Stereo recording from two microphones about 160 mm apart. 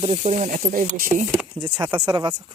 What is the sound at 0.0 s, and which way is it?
Speech, 40° right (ahead or behind).